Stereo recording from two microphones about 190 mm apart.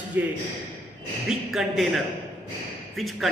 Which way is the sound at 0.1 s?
10° right (ahead or behind).